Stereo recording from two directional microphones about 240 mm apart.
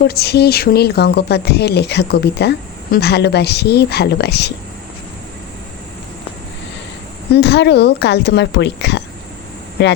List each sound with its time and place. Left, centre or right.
0.0 s speech: left
7.3 s speech: left